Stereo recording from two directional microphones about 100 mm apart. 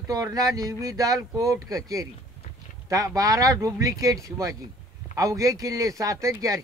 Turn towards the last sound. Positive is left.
turn(degrees=-35)  # may be behind; listen again after turning